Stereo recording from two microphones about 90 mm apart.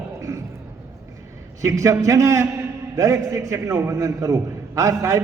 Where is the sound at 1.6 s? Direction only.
35° right (ahead or behind).